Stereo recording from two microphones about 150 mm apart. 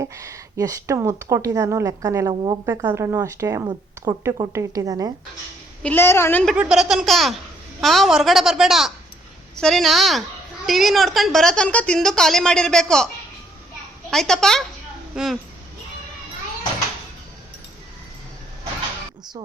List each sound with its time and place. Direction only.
0.0 s a woman's voice: 20° right (ahead or behind)
2.9 s speech: 20° right (ahead or behind)
5.8 s a woman's voice: 15° left (ahead or behind)
6.6 s a woman's voice: 5° right (ahead or behind)
14.1 s a woman's voice: 5° left (ahead or behind)